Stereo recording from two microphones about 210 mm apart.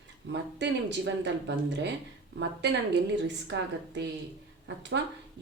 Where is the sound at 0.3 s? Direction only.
55° right (ahead or behind).